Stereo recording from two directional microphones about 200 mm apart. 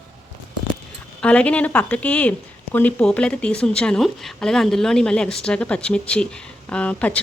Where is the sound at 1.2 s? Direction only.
5° left (ahead or behind).